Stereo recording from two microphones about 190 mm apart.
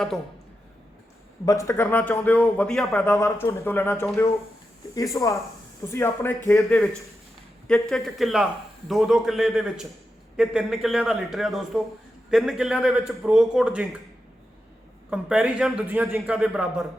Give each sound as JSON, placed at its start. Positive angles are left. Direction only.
{"t": 1.5, "sound": "a man's voice", "side_deg": 15}
{"t": 15.1, "sound": "a man's voice", "side_deg": -5}